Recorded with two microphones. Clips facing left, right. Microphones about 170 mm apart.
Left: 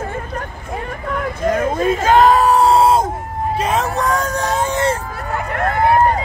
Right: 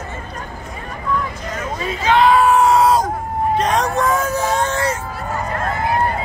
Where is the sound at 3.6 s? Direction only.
5° left (ahead or behind).